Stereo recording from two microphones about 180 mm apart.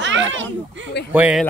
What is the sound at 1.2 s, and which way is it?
Speech, 5° right (ahead or behind).